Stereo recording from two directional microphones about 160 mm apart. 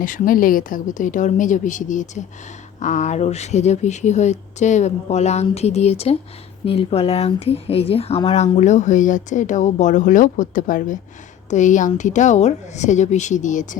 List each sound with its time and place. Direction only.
0.0 s speech: 60° left (ahead or behind)